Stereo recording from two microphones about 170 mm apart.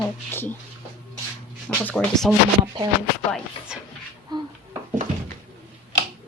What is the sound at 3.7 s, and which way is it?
Speech, 5° right (ahead or behind).